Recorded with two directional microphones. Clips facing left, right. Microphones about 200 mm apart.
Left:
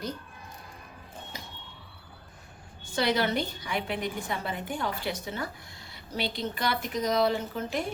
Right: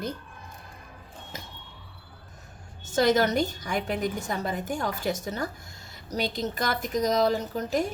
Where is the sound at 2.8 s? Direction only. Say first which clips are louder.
Right 5 dB; 45° right (ahead or behind).